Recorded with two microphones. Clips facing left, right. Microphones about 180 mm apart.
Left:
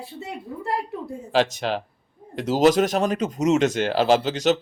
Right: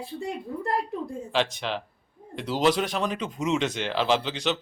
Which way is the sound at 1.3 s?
40° left (ahead or behind).